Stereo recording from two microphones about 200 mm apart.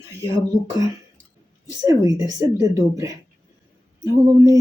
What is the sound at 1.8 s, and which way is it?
Speech, 15° right (ahead or behind).